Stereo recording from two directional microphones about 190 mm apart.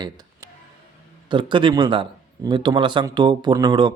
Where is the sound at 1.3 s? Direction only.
25° right (ahead or behind).